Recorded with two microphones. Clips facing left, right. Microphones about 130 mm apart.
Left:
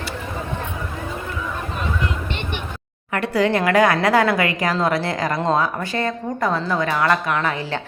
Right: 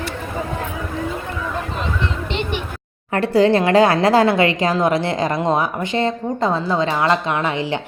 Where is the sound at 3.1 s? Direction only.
30° right (ahead or behind).